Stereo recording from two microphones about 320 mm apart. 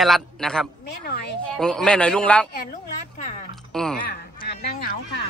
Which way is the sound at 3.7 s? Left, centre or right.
Centre.